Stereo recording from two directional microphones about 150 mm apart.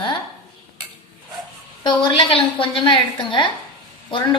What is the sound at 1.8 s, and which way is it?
A woman's voice, 35° left (ahead or behind).